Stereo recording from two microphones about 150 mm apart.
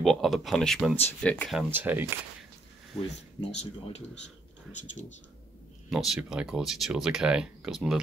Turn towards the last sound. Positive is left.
turn(degrees=0)  # may be behind; listen again after turning